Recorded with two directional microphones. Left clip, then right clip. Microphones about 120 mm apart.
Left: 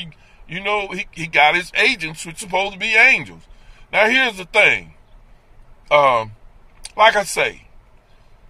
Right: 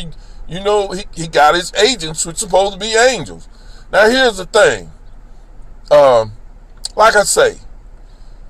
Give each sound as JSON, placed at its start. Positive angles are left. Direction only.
{"t": 0.6, "sound": "speech", "side_deg": 30}
{"t": 5.9, "sound": "speech", "side_deg": 25}